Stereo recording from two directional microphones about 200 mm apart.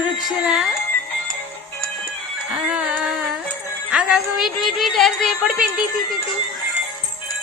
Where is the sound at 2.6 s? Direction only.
5° right (ahead or behind).